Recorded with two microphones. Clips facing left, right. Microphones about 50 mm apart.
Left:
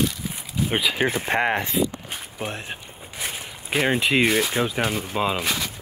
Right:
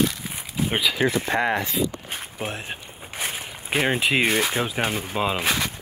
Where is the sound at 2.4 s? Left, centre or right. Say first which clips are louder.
Left 1 dB; centre.